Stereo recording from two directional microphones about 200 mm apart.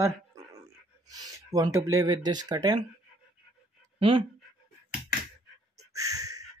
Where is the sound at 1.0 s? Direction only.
20° right (ahead or behind).